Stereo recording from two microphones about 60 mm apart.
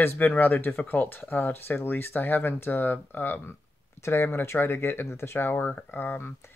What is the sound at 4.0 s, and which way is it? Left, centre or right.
Speech, left.